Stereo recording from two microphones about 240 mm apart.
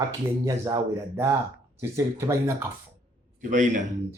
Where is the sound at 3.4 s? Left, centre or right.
Right.